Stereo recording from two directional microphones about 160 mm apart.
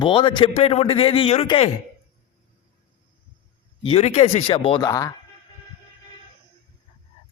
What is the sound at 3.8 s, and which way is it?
Speech, 40° left (ahead or behind).